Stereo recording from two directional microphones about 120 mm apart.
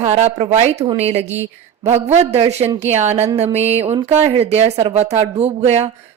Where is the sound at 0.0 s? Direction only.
55° right (ahead or behind).